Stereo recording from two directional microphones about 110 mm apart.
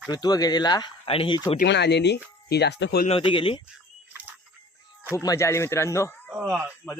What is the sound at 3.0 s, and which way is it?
Speech, 60° left (ahead or behind).